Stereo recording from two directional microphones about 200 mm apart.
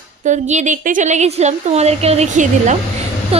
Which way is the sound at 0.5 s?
35° right (ahead or behind).